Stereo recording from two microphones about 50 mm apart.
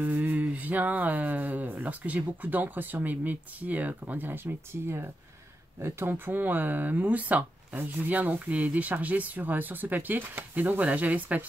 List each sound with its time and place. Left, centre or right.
0.0 s speech: right